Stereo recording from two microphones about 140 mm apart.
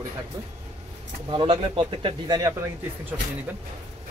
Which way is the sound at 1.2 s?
40° right (ahead or behind).